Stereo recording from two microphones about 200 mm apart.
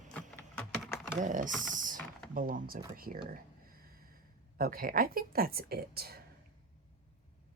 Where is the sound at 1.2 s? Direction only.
40° right (ahead or behind).